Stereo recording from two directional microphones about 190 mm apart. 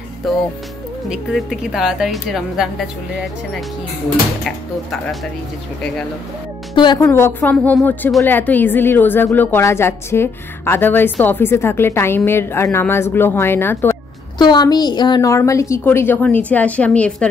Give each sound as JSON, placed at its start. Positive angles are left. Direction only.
{"t": 0.2, "sound": "a woman's voice", "side_deg": 0}
{"t": 6.7, "sound": "speech", "side_deg": 25}
{"t": 7.1, "sound": "a woman's voice", "side_deg": 10}